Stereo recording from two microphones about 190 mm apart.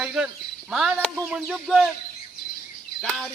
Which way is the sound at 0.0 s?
5° right (ahead or behind).